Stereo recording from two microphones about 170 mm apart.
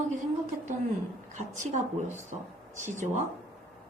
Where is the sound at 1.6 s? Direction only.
45° right (ahead or behind).